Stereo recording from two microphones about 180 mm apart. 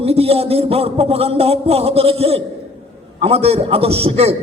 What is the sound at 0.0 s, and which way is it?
A man's voice, 35° right (ahead or behind).